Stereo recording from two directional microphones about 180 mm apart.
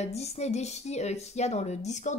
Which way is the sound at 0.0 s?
35° left (ahead or behind).